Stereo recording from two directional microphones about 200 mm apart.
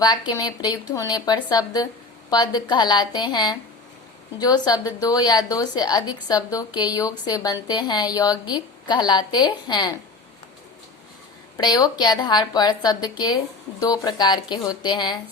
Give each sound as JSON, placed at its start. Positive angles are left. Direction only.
{"t": 0.0, "sound": "a woman's voice", "side_deg": 20}
{"t": 11.5, "sound": "a woman's voice", "side_deg": 20}